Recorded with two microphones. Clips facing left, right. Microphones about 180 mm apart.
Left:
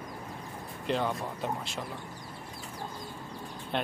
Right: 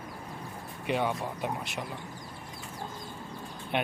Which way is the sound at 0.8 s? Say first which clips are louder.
Right 1 dB; 10° right (ahead or behind).